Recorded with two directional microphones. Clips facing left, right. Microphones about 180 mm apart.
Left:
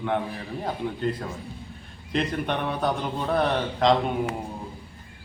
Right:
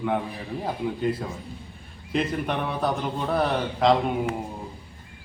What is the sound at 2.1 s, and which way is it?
A man's voice, centre (ahead or behind).